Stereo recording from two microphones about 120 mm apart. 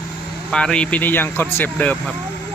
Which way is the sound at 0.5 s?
5° left (ahead or behind).